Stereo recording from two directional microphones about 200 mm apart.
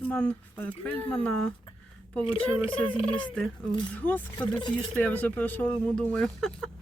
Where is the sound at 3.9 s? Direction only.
10° left (ahead or behind).